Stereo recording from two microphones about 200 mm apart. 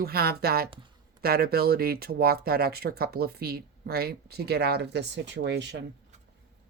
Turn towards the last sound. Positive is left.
turn(degrees=-60)  # may be behind; listen again after turning